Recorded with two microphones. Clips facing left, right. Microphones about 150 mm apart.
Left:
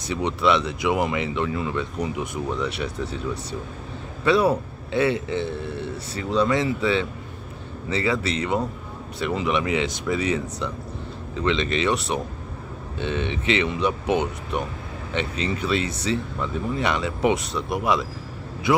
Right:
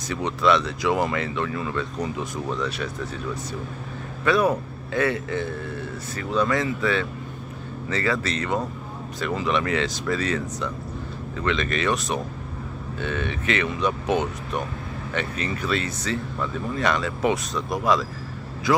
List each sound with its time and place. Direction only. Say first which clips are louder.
0.1 s a man's voice: even; 20° left (ahead or behind)
4.2 s a man's voice: left 1 dB; 25° left (ahead or behind)